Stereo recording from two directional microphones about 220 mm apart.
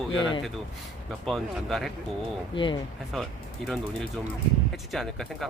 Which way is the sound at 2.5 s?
20° left (ahead or behind).